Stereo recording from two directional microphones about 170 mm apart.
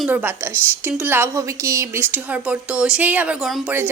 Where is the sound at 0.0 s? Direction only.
10° right (ahead or behind).